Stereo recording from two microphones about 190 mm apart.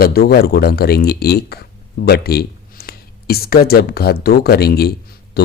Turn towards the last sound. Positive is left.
turn(degrees=55)  # may be behind; listen again after turning